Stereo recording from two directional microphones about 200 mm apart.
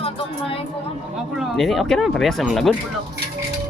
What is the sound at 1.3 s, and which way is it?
Speech, centre (ahead or behind).